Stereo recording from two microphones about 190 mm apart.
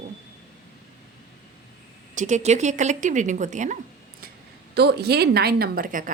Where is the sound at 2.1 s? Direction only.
40° right (ahead or behind).